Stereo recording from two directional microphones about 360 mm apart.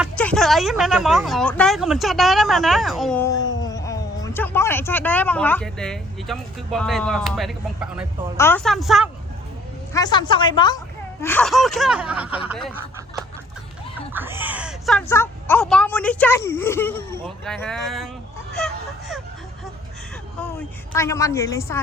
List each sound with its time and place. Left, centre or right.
0.0 s speech: centre
3.3 s cat: left
3.6 s speech: centre
9.9 s a woman's voice: centre
14.1 s speech: centre
20.9 s a woman's voice: centre